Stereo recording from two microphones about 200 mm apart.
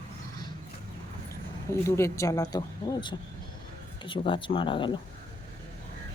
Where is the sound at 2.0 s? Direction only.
15° left (ahead or behind).